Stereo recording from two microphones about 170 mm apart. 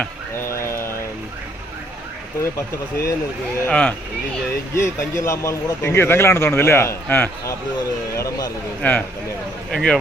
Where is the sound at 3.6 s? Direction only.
10° left (ahead or behind).